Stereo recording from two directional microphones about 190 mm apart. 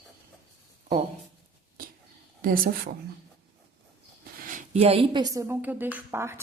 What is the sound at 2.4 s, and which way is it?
Speech, 45° right (ahead or behind).